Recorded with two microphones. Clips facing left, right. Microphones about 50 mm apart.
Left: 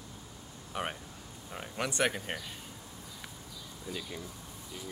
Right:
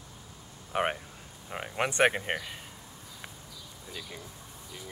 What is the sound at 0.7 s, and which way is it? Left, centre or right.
Speech, right.